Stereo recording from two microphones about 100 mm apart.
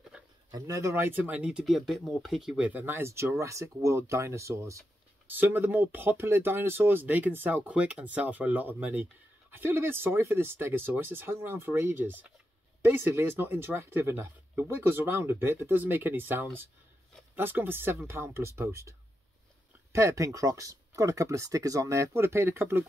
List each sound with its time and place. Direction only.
0.5 s speech: 35° right (ahead or behind)
5.3 s speech: 20° right (ahead or behind)